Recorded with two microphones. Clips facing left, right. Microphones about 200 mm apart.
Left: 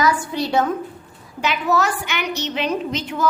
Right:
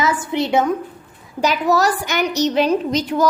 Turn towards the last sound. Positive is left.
turn(degrees=-40)  # may be behind; listen again after turning